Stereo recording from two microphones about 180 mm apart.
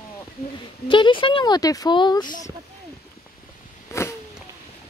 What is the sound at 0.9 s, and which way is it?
Speech, 30° left (ahead or behind).